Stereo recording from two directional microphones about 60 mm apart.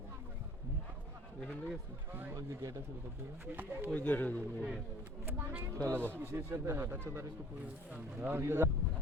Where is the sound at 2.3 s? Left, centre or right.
Right.